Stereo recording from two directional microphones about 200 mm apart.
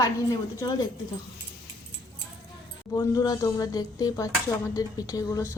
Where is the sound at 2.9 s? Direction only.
15° left (ahead or behind).